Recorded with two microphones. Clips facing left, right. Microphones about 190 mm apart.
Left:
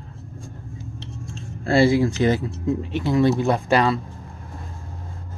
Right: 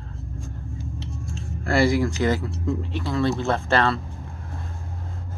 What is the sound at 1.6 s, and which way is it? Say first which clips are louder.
Speech: left 3 dB; 25° left (ahead or behind).